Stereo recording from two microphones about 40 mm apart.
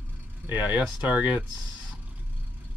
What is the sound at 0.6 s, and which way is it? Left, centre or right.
Speech, right.